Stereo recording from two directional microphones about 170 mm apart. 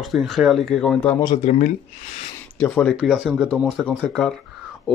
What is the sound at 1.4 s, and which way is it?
Speech, 45° left (ahead or behind).